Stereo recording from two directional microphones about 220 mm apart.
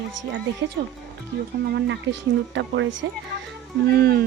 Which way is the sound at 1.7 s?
50° right (ahead or behind).